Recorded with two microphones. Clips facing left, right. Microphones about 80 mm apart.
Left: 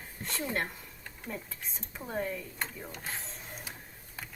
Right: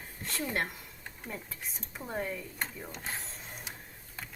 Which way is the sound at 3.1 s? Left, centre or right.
Centre.